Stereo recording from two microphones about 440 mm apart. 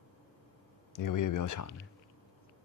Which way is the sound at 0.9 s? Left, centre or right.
Left.